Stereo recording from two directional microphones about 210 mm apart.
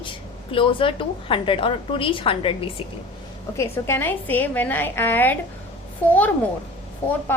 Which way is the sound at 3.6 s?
10° left (ahead or behind).